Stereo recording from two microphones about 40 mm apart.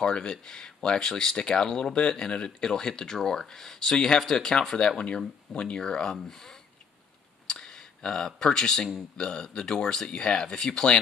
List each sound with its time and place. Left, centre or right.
0.0 s speech: left
4.7 s speech: left; by 6.5 s centre
7.4 s a sound: centre
9.1 s speech: left